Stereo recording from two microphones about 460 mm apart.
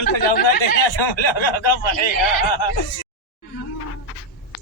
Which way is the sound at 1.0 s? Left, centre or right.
Left.